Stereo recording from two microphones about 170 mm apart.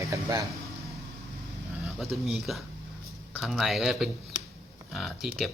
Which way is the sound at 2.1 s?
Centre (ahead or behind).